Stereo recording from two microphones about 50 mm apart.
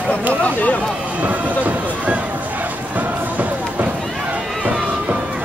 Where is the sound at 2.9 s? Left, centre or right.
Right.